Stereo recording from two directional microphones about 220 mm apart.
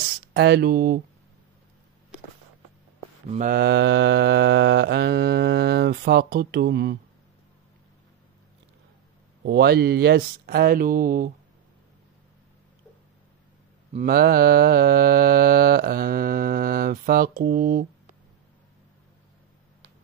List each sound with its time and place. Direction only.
0.3 s mantra: 50° right (ahead or behind)
3.3 s mantra: 35° right (ahead or behind)
9.4 s mantra: 45° right (ahead or behind)
13.9 s mantra: 45° right (ahead or behind)